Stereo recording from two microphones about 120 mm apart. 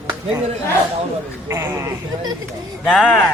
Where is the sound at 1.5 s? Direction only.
20° right (ahead or behind).